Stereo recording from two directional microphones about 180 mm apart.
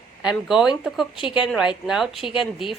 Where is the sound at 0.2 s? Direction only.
5° right (ahead or behind).